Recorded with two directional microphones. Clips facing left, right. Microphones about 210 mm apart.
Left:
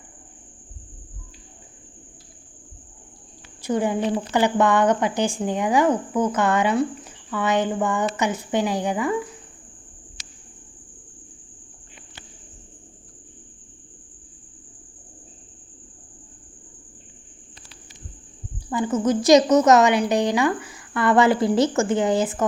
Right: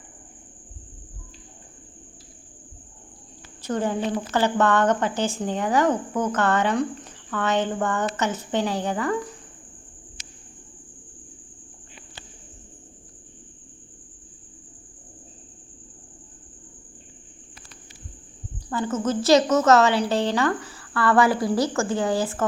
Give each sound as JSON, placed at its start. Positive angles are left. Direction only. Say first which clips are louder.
{"t": 3.6, "sound": "a woman's voice", "louder": "left 3 dB", "side_deg": 10}
{"t": 18.7, "sound": "a woman's voice", "louder": "left 3 dB", "side_deg": 15}